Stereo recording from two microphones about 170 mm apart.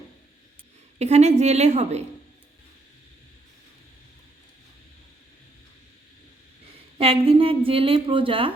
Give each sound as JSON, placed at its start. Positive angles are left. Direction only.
{"t": 0.9, "sound": "a woman's voice", "side_deg": -40}
{"t": 7.0, "sound": "a woman's voice", "side_deg": -35}